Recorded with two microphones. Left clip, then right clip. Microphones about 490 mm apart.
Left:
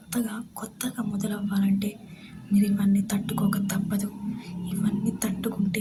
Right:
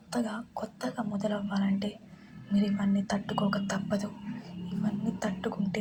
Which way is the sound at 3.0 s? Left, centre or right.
Left.